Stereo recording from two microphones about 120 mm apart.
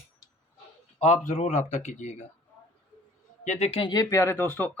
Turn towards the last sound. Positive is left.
turn(degrees=20)  # may be behind; listen again after turning